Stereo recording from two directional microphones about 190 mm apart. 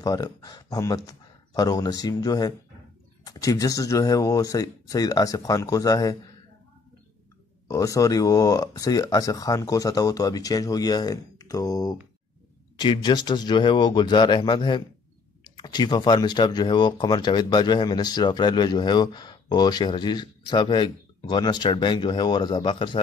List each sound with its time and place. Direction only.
0.0 s speech: 20° left (ahead or behind)
7.6 s speech: 15° left (ahead or behind)